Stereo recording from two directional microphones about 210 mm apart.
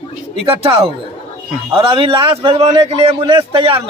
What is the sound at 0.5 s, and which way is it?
A man's voice, 25° right (ahead or behind).